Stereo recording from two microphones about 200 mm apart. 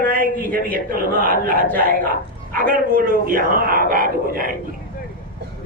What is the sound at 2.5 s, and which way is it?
Speech, 45° right (ahead or behind).